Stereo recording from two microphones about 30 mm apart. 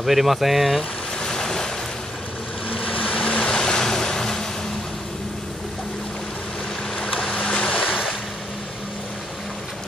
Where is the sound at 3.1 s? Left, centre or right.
Left.